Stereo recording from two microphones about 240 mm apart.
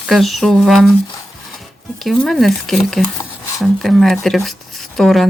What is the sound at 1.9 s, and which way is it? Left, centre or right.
Speech, centre.